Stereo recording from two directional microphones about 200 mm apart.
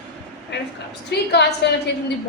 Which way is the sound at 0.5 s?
60° left (ahead or behind).